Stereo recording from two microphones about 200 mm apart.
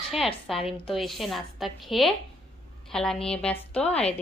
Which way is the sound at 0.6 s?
30° left (ahead or behind).